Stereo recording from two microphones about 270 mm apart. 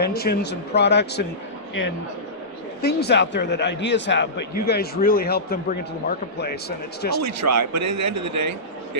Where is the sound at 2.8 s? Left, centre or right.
Left.